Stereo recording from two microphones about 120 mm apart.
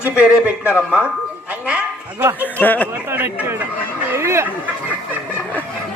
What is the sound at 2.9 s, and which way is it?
Speech, 15° right (ahead or behind).